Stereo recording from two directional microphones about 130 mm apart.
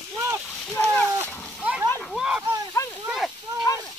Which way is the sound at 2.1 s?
5° right (ahead or behind).